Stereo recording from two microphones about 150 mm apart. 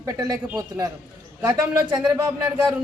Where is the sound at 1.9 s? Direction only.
25° right (ahead or behind).